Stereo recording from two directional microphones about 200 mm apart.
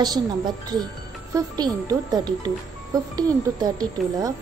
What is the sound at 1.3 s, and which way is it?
Speech, 20° right (ahead or behind).